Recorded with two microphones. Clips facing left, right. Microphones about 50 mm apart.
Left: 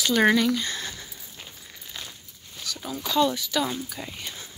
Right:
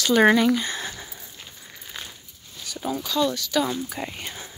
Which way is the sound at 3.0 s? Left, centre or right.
Centre.